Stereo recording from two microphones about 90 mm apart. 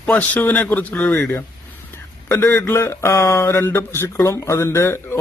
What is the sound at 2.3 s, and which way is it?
Speech, 35° left (ahead or behind).